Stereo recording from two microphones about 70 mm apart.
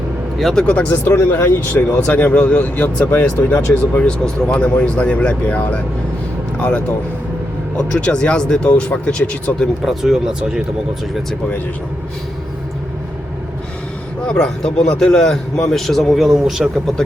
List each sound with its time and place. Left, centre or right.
0.3 s speech: centre
0.6 s speech: centre; by 2.0 s left
2.0 s speech: left
9.8 s speech: centre
14.3 s speech: centre